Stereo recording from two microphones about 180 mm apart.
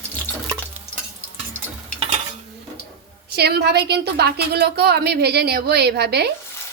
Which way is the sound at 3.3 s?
65° right (ahead or behind).